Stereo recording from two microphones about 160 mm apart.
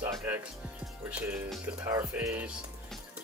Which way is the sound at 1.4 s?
Centre (ahead or behind).